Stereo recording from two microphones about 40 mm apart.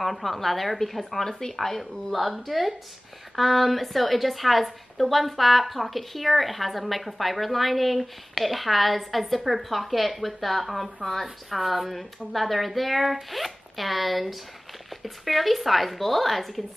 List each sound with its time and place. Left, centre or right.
0.0 s a woman's voice: centre
11.5 s a woman's voice: centre